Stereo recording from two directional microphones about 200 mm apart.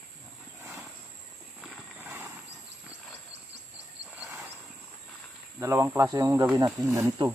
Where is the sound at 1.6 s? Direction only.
5° right (ahead or behind).